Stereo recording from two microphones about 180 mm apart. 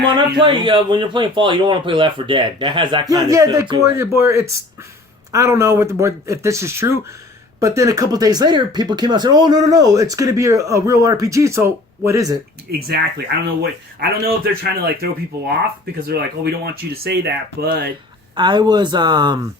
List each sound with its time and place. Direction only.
0.0 s speech: 25° right (ahead or behind)
12.7 s speech: 60° right (ahead or behind)
16.9 s speech: 60° right (ahead or behind)
18.3 s speech: 25° right (ahead or behind)